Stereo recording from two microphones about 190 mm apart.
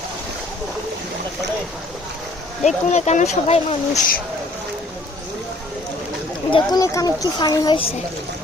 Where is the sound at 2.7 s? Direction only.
35° left (ahead or behind).